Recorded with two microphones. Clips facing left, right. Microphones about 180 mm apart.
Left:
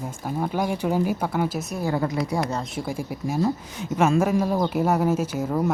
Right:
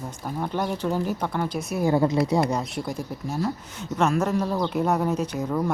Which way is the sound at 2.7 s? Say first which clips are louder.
Left 1 dB; 10° left (ahead or behind).